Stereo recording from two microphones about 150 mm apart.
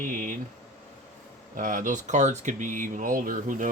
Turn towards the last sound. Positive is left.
turn(degrees=-60)  # may be behind; listen again after turning